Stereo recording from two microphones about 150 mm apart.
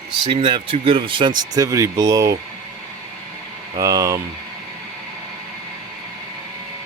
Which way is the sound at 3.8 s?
25° right (ahead or behind).